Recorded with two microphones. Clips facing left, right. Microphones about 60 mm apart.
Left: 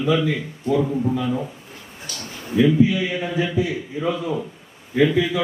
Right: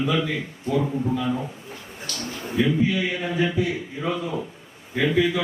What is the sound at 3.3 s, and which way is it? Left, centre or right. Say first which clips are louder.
Speech: even; centre.